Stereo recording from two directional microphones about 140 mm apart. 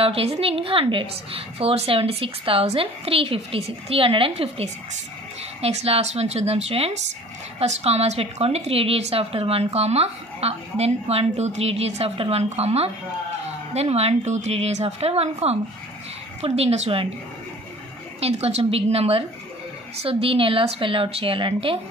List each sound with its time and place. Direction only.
0.0 s a woman's voice: 45° right (ahead or behind)
18.2 s a woman's voice: 45° right (ahead or behind)